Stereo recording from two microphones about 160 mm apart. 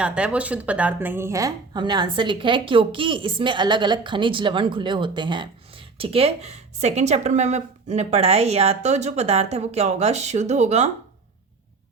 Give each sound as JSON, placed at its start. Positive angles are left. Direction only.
{"t": 0.0, "sound": "speech", "side_deg": -5}